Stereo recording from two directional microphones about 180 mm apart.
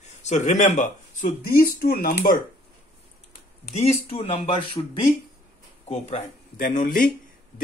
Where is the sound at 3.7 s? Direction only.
35° left (ahead or behind).